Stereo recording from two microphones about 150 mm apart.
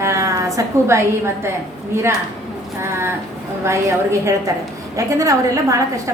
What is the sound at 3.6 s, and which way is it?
A woman's voice, 20° right (ahead or behind).